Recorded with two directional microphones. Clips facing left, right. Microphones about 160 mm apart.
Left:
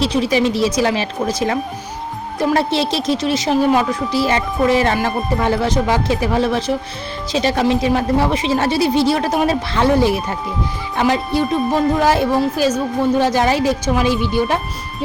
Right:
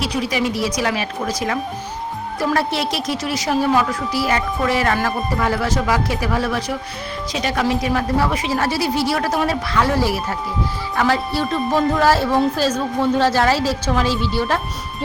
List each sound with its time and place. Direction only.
0.0 s a woman's voice: 25° left (ahead or behind)
2.4 s a woman's voice: 20° left (ahead or behind)